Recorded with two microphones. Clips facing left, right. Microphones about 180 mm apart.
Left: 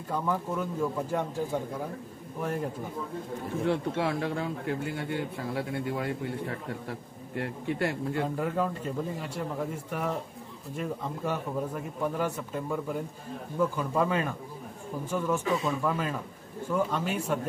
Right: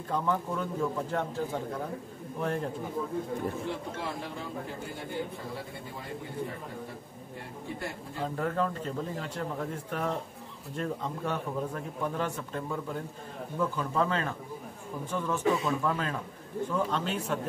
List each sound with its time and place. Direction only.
0.1 s a man's voice: 5° left (ahead or behind)
2.4 s a man's voice: 5° left (ahead or behind)
3.6 s speech: 70° left (ahead or behind)
8.2 s a man's voice: 10° left (ahead or behind)